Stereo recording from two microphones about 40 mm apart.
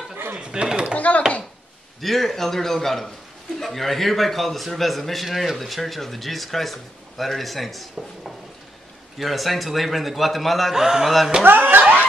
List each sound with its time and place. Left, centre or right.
0.4 s chopping: right
0.9 s speech: left
2.0 s a man's voice: centre
11.4 s speech: right